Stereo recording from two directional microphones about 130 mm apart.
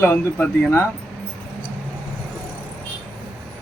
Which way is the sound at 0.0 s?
15° left (ahead or behind).